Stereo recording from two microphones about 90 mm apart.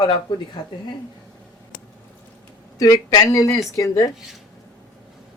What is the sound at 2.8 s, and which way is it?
Speech, 40° left (ahead or behind).